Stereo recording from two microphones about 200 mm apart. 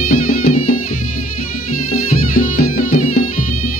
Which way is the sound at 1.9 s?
45° left (ahead or behind).